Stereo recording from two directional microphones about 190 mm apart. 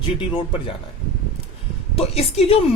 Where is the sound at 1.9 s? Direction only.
35° left (ahead or behind).